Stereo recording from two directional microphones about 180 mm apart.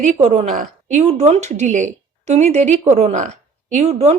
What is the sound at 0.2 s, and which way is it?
A woman's voice, 40° right (ahead or behind).